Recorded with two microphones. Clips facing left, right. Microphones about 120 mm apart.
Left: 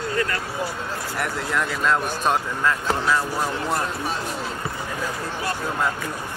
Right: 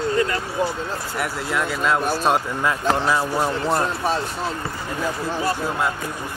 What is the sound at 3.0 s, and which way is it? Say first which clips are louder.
Speech: right 2 dB; 20° right (ahead or behind).